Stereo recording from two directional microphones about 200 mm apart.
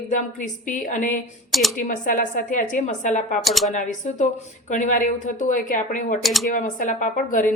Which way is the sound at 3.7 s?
35° left (ahead or behind).